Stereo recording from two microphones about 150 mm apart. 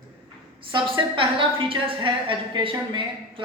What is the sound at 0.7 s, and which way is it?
A woman's voice, 35° right (ahead or behind).